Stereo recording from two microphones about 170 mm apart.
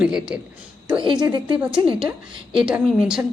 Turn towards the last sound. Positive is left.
turn(degrees=-5)  # may be behind; listen again after turning